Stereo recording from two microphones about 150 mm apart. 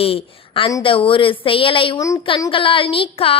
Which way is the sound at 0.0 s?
40° left (ahead or behind).